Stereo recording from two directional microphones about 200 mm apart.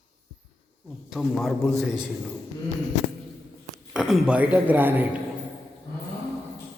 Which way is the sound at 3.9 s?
5° right (ahead or behind).